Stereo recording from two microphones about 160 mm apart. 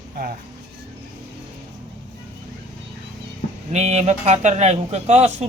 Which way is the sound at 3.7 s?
45° right (ahead or behind).